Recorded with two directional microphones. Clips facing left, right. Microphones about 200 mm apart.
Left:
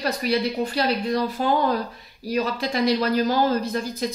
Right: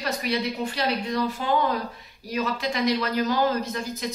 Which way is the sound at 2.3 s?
35° left (ahead or behind).